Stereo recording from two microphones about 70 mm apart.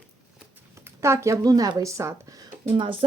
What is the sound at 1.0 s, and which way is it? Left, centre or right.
A woman's voice, right.